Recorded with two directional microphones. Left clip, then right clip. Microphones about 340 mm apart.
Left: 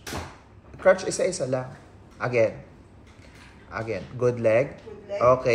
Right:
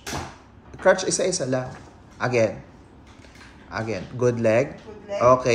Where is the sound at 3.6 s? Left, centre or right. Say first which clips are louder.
Right 2 dB; centre.